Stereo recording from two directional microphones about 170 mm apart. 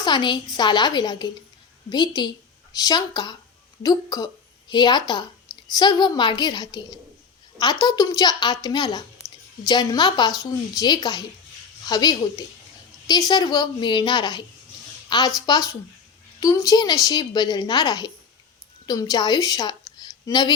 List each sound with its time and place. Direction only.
0.0 s a woman's voice: 25° left (ahead or behind)